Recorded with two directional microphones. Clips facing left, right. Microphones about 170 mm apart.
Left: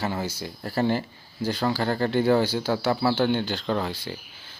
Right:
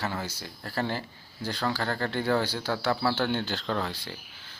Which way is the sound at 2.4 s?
5° left (ahead or behind).